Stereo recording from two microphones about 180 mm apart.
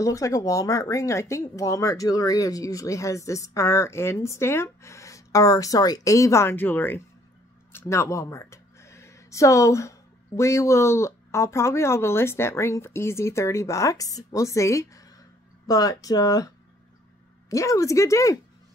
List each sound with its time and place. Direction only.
0.0 s speech: 20° left (ahead or behind)
17.5 s speech: 15° left (ahead or behind)